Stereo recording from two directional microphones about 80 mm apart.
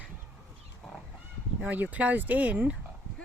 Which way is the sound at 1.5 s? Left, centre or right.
Centre.